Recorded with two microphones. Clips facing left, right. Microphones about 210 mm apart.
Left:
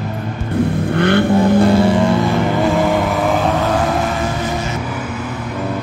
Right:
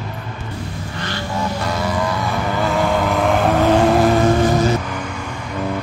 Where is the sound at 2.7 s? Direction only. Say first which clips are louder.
Left 2 dB; centre (ahead or behind).